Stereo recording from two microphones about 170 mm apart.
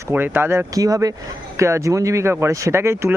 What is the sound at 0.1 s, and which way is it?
Speech, 15° right (ahead or behind).